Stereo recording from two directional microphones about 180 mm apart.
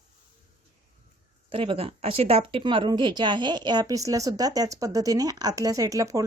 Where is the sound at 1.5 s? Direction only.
30° right (ahead or behind).